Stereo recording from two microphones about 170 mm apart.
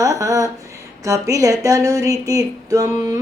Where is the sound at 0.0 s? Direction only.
20° right (ahead or behind).